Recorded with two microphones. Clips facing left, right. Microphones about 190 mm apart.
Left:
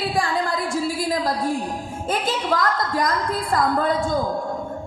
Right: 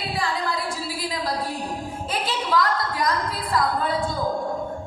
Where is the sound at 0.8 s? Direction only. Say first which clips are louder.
Left 6 dB; 45° left (ahead or behind).